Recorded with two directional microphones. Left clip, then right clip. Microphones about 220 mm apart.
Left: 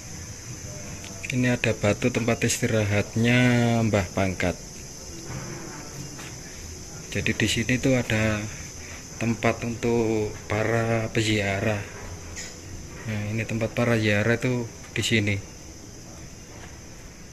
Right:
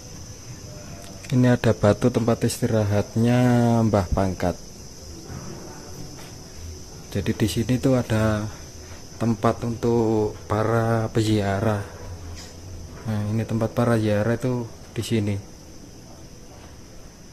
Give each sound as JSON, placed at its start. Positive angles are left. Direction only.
{"t": 1.3, "sound": "speech", "side_deg": -30}
{"t": 3.9, "sound": "speech", "side_deg": 0}
{"t": 7.1, "sound": "speech", "side_deg": -25}
{"t": 10.5, "sound": "speech", "side_deg": -15}
{"t": 13.1, "sound": "speech", "side_deg": -25}